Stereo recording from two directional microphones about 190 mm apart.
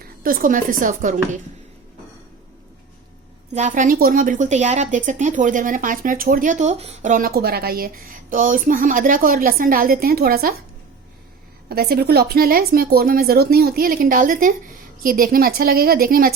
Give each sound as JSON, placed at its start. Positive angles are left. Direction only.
{"t": 0.2, "sound": "a woman's voice", "side_deg": -50}
{"t": 3.5, "sound": "a woman's voice", "side_deg": -40}
{"t": 11.7, "sound": "a woman's voice", "side_deg": -55}